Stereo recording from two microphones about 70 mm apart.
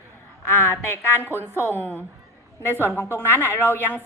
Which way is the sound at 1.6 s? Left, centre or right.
Left.